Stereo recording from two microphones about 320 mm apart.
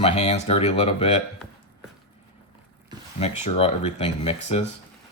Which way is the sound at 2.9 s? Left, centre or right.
Centre.